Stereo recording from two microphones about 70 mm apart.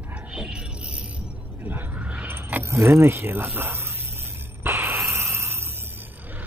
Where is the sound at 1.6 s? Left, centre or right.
Right.